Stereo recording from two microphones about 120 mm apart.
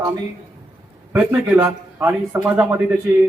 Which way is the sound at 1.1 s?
15° right (ahead or behind).